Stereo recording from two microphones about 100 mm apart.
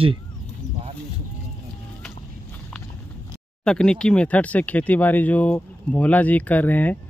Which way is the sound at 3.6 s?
5° left (ahead or behind).